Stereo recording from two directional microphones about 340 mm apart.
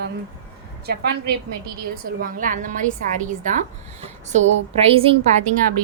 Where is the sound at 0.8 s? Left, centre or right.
Right.